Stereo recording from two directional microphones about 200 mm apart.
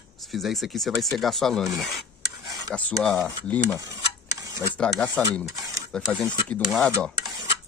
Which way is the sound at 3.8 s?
15° right (ahead or behind).